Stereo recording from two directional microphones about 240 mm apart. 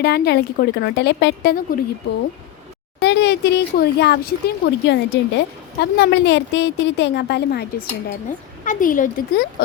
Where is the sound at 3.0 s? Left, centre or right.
Left.